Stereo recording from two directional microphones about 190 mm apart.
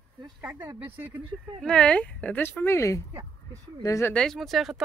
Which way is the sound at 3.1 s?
15° right (ahead or behind).